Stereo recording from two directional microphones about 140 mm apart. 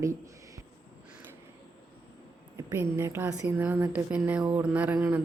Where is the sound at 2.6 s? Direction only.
20° right (ahead or behind).